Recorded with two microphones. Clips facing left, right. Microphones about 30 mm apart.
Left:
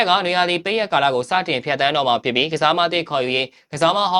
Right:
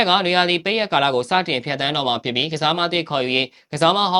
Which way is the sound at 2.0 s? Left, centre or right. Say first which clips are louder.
Left 3 dB; centre.